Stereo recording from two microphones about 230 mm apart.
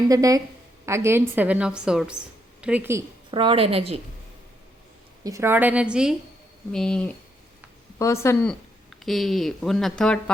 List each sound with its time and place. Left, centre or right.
0.1 s a woman's voice: centre
3.3 s a woman's voice: right
5.2 s a woman's voice: centre